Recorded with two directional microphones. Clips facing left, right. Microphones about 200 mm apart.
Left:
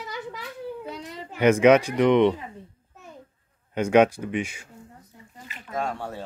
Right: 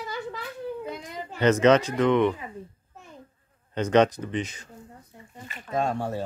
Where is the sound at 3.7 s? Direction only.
10° left (ahead or behind).